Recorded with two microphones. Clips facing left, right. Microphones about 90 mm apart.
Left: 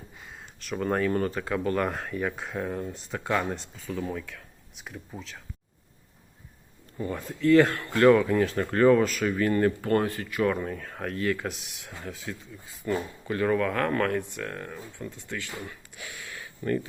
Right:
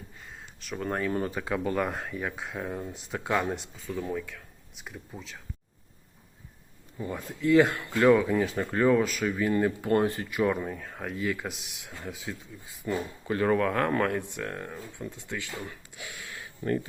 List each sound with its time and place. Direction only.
0.2 s speech: centre (ahead or behind); by 1.8 s 15° right (ahead or behind)
1.8 s speech: centre (ahead or behind)
7.3 s speech: 10° right (ahead or behind)
12.0 s speech: 15° right (ahead or behind)
13.2 s speech: 25° right (ahead or behind)
16.0 s a sound: 30° right (ahead or behind)